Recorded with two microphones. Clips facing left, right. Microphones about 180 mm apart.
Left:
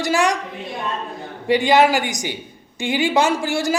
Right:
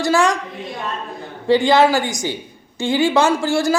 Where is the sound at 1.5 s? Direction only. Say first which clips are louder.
Right 2 dB; 15° left (ahead or behind).